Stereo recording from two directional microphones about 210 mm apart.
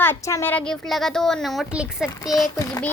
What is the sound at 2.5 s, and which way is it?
Speech, 15° left (ahead or behind).